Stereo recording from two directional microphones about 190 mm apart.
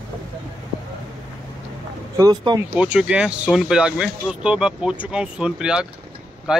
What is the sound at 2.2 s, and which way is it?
Speech, 20° right (ahead or behind).